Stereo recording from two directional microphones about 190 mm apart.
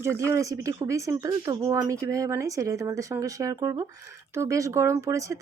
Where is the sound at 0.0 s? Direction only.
15° right (ahead or behind).